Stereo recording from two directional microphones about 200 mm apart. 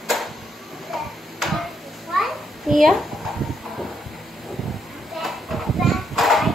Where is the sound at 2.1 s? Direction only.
Centre (ahead or behind).